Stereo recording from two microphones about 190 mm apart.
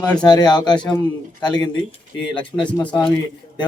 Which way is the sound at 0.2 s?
20° left (ahead or behind).